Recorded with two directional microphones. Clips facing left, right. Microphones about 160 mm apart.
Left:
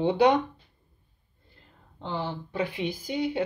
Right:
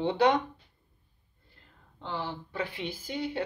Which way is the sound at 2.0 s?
20° left (ahead or behind).